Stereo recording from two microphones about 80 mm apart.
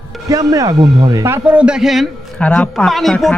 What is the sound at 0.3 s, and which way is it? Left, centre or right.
Speech, right.